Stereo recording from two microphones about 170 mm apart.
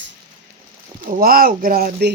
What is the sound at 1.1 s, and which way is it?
Speech, 60° right (ahead or behind).